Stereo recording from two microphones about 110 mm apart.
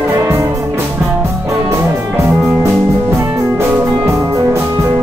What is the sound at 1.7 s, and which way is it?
Music, 25° right (ahead or behind).